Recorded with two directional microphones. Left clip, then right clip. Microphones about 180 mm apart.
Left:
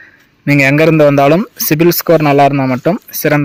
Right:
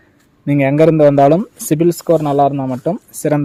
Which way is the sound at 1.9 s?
40° left (ahead or behind).